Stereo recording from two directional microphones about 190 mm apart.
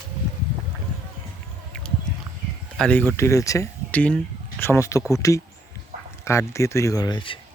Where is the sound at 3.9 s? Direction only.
5° left (ahead or behind).